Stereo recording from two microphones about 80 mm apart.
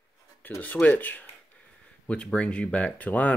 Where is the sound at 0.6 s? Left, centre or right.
Left.